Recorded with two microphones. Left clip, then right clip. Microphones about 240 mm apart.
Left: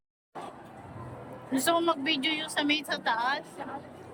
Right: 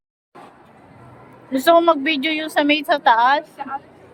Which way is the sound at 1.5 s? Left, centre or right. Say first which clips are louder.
Right 13 dB; centre.